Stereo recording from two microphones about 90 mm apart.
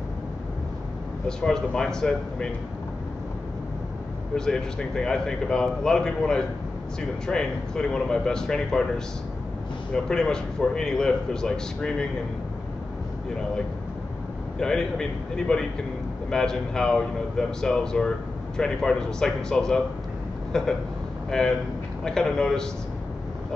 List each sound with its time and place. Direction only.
1.2 s a man's voice: 10° left (ahead or behind)
4.4 s a man's voice: 5° left (ahead or behind)
14.6 s a man's voice: 5° left (ahead or behind)